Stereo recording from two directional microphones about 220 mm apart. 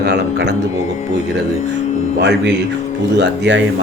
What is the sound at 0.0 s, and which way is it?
Speech, 50° right (ahead or behind).